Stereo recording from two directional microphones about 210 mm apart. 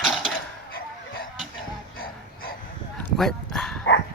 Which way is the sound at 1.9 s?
45° left (ahead or behind).